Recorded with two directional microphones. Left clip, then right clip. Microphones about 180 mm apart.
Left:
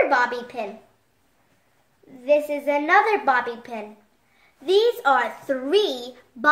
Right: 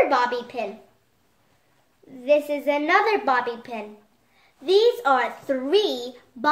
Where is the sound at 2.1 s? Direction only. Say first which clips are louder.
Even; 5° left (ahead or behind).